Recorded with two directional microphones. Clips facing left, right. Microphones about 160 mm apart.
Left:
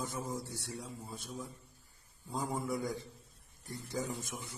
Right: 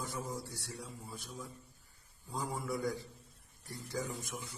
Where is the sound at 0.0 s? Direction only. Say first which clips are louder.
Left 2 dB; 20° left (ahead or behind).